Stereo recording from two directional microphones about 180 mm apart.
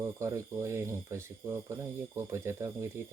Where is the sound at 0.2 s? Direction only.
15° right (ahead or behind).